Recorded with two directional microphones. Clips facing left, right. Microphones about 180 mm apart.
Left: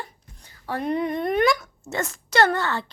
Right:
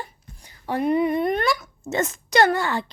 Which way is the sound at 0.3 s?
15° right (ahead or behind).